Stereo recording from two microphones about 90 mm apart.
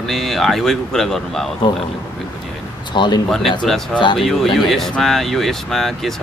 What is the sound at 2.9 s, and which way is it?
Speech, 60° left (ahead or behind).